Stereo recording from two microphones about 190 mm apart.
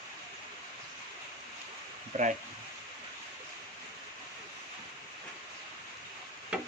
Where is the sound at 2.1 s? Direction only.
40° right (ahead or behind).